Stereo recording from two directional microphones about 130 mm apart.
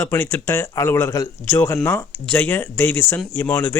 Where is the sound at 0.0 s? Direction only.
15° left (ahead or behind).